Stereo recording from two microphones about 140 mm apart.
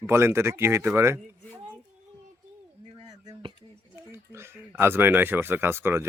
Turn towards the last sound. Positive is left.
turn(degrees=-15)  # may be behind; listen again after turning